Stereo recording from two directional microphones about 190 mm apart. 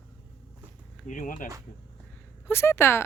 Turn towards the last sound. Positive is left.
turn(degrees=15)  # may be behind; listen again after turning